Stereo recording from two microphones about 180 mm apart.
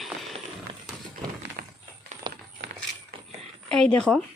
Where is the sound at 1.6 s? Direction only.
55° right (ahead or behind).